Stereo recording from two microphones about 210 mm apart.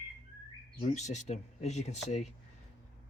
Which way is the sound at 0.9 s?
35° left (ahead or behind).